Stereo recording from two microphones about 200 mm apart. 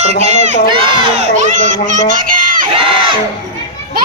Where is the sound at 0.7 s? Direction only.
25° right (ahead or behind).